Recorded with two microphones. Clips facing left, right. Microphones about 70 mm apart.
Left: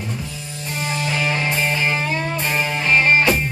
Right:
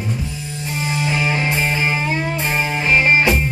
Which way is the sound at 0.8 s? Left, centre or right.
Centre.